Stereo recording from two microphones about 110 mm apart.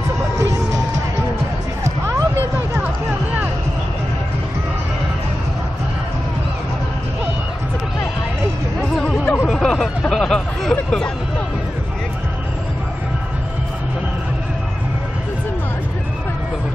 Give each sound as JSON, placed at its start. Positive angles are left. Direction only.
{"t": 0.4, "sound": "music", "side_deg": -25}
{"t": 8.9, "sound": "chatter", "side_deg": 5}
{"t": 9.5, "sound": "a sound", "side_deg": 5}